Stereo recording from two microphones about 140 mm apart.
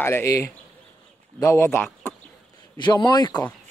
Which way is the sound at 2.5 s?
30° left (ahead or behind).